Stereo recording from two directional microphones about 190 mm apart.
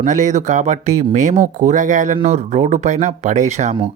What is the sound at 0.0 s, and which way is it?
Speech, 40° right (ahead or behind).